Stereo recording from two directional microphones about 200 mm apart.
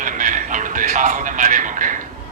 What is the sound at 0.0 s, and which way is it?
Music, 40° right (ahead or behind).